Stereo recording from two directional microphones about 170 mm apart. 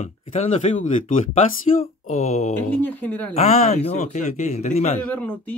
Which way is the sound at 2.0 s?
45° left (ahead or behind).